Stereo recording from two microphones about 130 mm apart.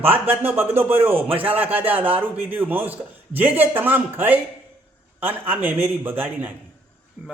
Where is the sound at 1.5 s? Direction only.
15° right (ahead or behind).